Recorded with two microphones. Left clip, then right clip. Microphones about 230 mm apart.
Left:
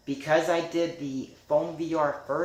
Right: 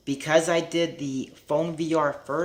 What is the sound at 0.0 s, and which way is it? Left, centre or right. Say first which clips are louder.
Speech: right 3 dB; right.